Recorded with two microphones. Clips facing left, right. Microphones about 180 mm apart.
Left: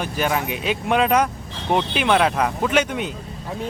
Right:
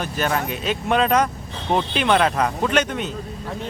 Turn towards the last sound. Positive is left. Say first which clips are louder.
# even
turn(degrees=10)  # may be behind; listen again after turning